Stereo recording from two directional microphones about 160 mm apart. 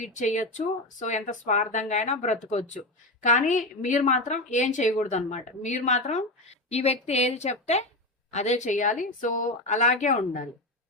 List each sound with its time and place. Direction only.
0.0 s speech: 50° left (ahead or behind)